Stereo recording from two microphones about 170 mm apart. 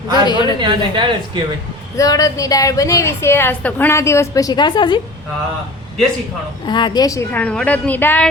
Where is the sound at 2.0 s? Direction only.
20° left (ahead or behind).